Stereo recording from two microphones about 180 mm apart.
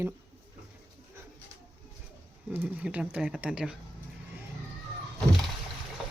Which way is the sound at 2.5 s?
10° right (ahead or behind).